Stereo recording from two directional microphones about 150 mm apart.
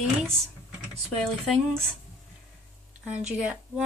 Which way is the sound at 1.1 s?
Centre (ahead or behind).